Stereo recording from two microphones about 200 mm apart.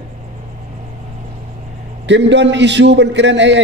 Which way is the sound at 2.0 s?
60° right (ahead or behind).